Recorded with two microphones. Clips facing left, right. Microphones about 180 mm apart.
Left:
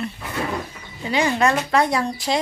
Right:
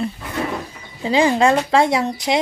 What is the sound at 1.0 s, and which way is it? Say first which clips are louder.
Speech: right 4 dB; 30° right (ahead or behind).